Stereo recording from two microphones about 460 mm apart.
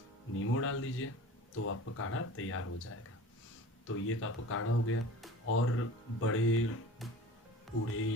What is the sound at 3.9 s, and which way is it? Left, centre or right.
Speech, left.